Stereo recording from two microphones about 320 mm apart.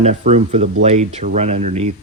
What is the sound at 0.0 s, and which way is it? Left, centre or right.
Speech, right.